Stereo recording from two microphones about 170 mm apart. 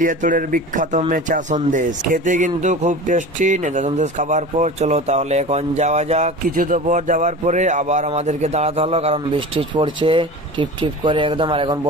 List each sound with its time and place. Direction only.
0.0 s speech: 50° right (ahead or behind); by 11.9 s 30° right (ahead or behind)